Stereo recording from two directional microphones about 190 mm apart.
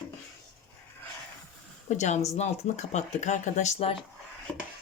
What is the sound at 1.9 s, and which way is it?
Speech, 40° left (ahead or behind).